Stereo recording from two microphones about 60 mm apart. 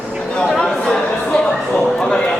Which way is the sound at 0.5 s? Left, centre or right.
Centre.